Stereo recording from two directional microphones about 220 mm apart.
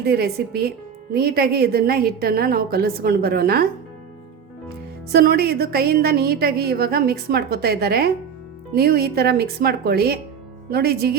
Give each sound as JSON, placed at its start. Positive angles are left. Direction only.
{"t": 0.0, "sound": "a woman's voice", "side_deg": -45}
{"t": 5.1, "sound": "a woman's voice", "side_deg": -45}